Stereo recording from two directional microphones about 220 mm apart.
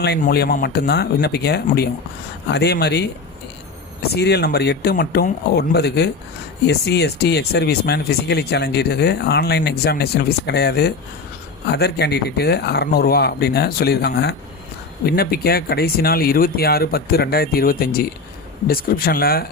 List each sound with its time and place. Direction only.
0.0 s speech: 50° left (ahead or behind)
4.1 s speech: 50° left (ahead or behind)